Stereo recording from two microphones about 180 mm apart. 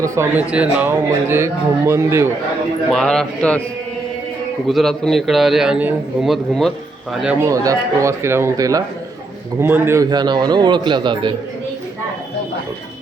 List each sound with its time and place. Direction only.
0.0 s speech: 10° right (ahead or behind)
2.9 s a man's voice: 5° left (ahead or behind)
4.7 s a man's voice: centre (ahead or behind)
7.4 s a man's voice: 20° right (ahead or behind)